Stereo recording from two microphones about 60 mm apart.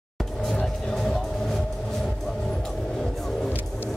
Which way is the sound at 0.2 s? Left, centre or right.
Centre.